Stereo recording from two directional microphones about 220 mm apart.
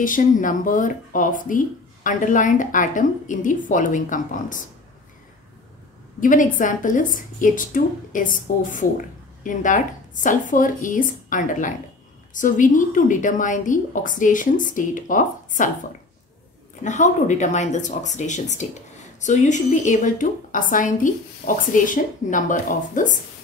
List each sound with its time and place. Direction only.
0.0 s a woman's voice: 35° left (ahead or behind)
6.2 s a woman's voice: 35° left (ahead or behind)
16.8 s a woman's voice: 35° left (ahead or behind)